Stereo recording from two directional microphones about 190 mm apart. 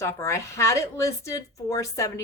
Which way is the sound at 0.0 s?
15° left (ahead or behind).